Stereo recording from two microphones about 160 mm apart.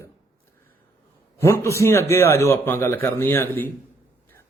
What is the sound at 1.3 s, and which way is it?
A man's voice, 15° left (ahead or behind).